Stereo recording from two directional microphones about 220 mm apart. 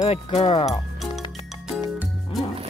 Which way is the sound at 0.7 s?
Centre (ahead or behind).